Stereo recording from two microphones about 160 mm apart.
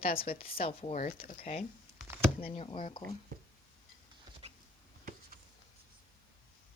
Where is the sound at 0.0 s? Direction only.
35° left (ahead or behind).